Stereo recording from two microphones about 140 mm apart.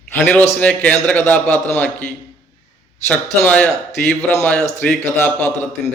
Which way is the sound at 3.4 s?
10° left (ahead or behind).